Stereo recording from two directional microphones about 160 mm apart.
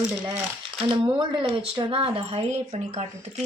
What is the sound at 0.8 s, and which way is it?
Speech, 30° right (ahead or behind).